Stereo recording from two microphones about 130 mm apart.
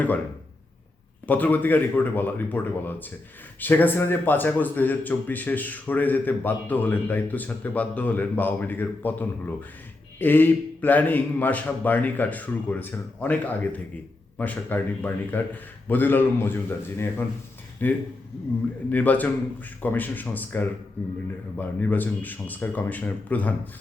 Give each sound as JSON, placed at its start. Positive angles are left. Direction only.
{"t": 1.3, "sound": "speech", "side_deg": 15}
{"t": 21.8, "sound": "speech", "side_deg": 15}